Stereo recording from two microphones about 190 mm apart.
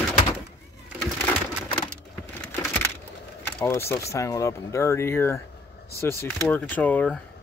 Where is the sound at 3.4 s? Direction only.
10° left (ahead or behind).